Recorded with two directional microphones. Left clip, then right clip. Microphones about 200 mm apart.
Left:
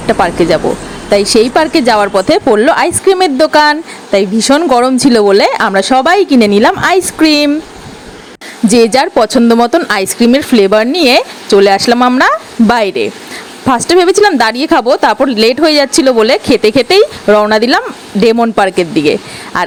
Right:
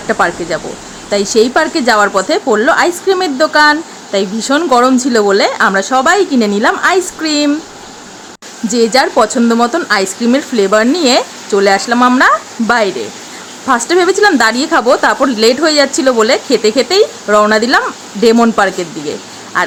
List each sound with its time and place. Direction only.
0.1 s speech: 35° left (ahead or behind)
8.7 s speech: 35° left (ahead or behind)